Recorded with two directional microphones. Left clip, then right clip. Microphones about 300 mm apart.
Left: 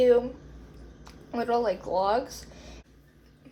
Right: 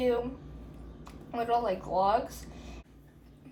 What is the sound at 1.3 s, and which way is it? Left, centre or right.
A woman's voice, left.